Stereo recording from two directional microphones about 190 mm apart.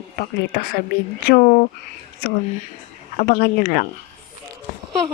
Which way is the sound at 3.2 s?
55° left (ahead or behind).